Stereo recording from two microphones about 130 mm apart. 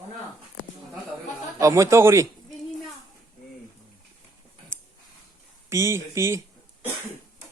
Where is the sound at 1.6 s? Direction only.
25° right (ahead or behind).